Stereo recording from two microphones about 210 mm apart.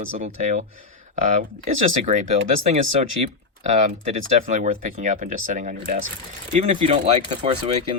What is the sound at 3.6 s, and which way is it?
Speech, 35° right (ahead or behind).